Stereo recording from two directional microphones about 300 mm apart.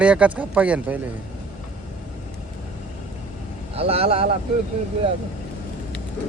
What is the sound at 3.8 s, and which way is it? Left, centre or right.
Speech, centre.